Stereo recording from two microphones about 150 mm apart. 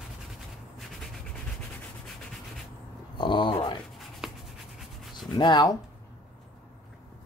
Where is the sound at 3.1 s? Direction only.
30° left (ahead or behind).